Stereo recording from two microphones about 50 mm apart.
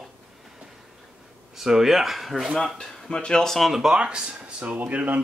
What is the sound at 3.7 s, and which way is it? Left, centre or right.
Speech, centre.